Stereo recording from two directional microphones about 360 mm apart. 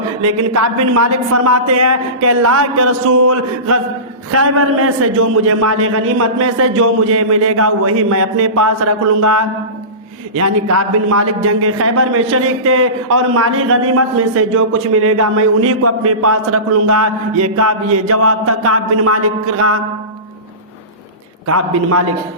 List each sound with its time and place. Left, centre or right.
0.3 s a woman's voice: right
21.4 s a man's voice: right